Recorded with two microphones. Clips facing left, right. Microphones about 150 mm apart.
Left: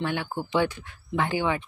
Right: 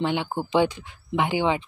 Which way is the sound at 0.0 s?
20° right (ahead or behind).